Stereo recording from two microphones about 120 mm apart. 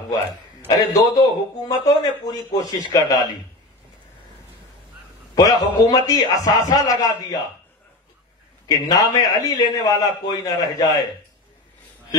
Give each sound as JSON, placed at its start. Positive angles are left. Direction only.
{"t": 0.7, "sound": "a man's voice", "side_deg": 30}
{"t": 5.3, "sound": "a man's voice", "side_deg": 30}
{"t": 8.6, "sound": "a man's voice", "side_deg": 30}